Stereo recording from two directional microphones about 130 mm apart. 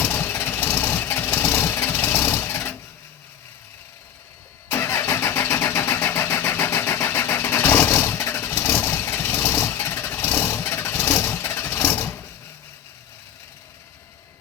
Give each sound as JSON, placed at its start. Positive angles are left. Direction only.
{"t": 0.0, "sound": "engine", "side_deg": 15}
{"t": 4.7, "sound": "vehicle", "side_deg": 15}